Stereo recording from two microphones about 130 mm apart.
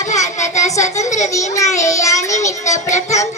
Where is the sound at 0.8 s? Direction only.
65° left (ahead or behind).